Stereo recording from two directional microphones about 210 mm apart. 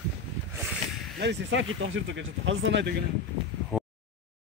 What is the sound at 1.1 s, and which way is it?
Speech, 60° right (ahead or behind).